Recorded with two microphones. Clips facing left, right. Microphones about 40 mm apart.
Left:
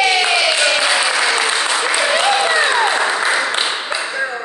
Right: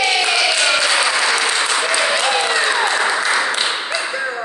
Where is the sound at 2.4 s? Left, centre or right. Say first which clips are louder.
Left 2 dB; centre.